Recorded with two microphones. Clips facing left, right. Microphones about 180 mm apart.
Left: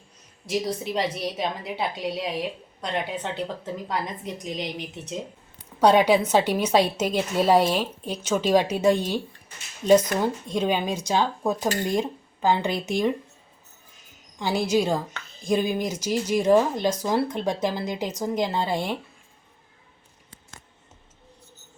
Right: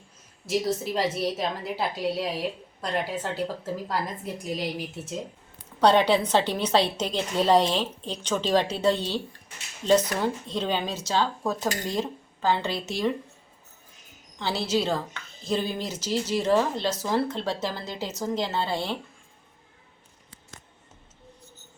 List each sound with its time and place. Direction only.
0.4 s a woman's voice: centre (ahead or behind)
5.8 s speech: 10° left (ahead or behind)
14.3 s speech: 10° left (ahead or behind)